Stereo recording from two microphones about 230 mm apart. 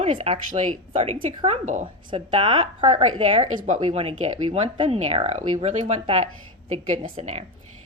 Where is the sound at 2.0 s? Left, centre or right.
Right.